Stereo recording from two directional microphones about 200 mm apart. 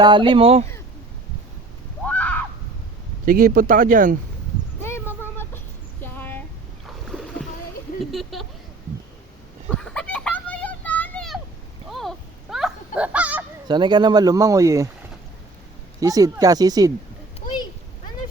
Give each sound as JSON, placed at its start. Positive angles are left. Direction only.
{"t": 0.0, "sound": "speech", "side_deg": -25}
{"t": 2.0, "sound": "a sound", "side_deg": 5}
{"t": 3.2, "sound": "speech", "side_deg": -45}
{"t": 4.8, "sound": "a sound", "side_deg": 10}
{"t": 6.8, "sound": "rowboat", "side_deg": 0}
{"t": 8.1, "sound": "a sound", "side_deg": 0}
{"t": 9.6, "sound": "children playing", "side_deg": 5}
{"t": 11.9, "sound": "goose", "side_deg": 0}
{"t": 13.7, "sound": "speech", "side_deg": -20}
{"t": 16.0, "sound": "speech", "side_deg": -15}